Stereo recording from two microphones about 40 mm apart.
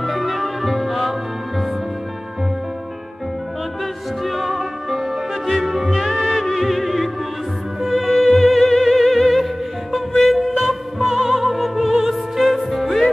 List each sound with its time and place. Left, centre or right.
0.0 s music: centre
4.2 s music: centre